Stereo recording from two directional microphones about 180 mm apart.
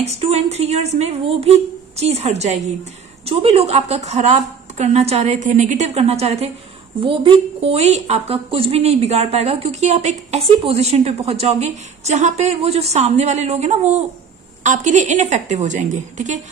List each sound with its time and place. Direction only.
0.0 s a woman's voice: 35° right (ahead or behind)